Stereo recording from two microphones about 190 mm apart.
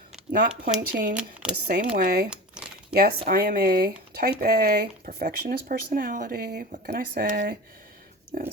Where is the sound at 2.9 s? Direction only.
55° right (ahead or behind).